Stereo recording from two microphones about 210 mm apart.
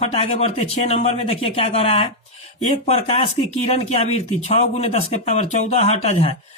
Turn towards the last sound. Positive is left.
turn(degrees=30)  # may be behind; listen again after turning